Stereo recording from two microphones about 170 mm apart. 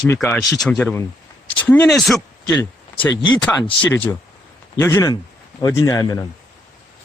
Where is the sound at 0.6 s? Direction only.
5° left (ahead or behind).